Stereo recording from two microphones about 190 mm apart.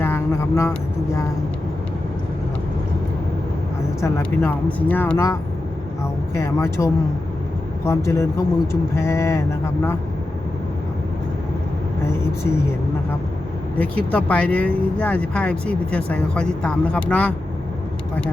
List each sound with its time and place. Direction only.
0.0 s a sound: 15° left (ahead or behind)
4.0 s speech: 10° left (ahead or behind)
13.7 s speech: 10° left (ahead or behind)